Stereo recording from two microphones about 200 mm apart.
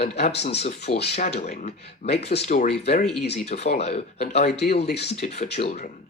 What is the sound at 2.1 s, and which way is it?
Speech, 55° left (ahead or behind).